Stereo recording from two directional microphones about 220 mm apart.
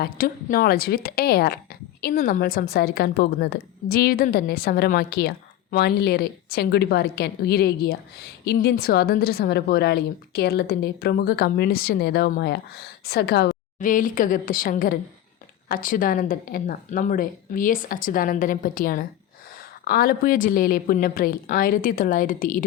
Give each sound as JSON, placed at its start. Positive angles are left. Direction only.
{"t": 0.0, "sound": "a woman's voice", "side_deg": 40}